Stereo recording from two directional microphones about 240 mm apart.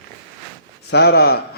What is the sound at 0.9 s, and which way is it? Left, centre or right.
Speech, left.